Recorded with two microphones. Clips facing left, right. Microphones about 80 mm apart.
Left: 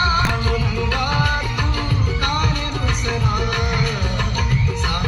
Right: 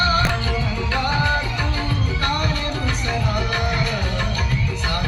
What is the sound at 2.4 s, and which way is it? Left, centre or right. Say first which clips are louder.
Music: left 1 dB; left.